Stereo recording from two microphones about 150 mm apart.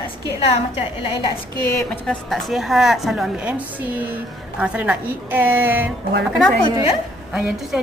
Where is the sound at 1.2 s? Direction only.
20° left (ahead or behind).